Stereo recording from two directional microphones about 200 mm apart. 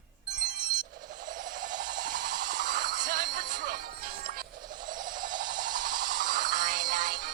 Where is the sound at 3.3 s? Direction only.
40° right (ahead or behind).